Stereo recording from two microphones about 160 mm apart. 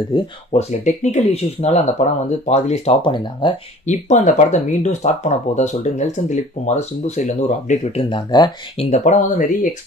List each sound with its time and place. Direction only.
0.1 s speech: 40° left (ahead or behind)
3.8 s speech: 50° left (ahead or behind)
8.0 s speech: 30° left (ahead or behind)
8.7 s speech: 45° left (ahead or behind)